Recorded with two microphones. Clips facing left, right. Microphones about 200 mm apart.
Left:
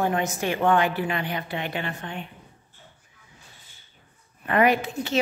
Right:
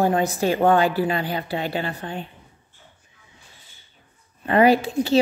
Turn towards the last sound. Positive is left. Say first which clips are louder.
# right 5 dB
turn(degrees=-30)  # may be behind; listen again after turning